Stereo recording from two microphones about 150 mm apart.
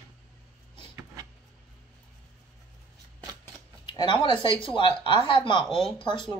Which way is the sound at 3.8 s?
30° left (ahead or behind).